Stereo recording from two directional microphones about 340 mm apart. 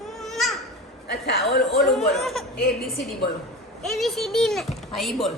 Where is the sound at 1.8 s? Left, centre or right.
Centre.